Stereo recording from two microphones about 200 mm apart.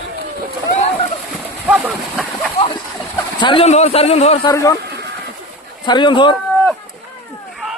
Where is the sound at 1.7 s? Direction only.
5° right (ahead or behind).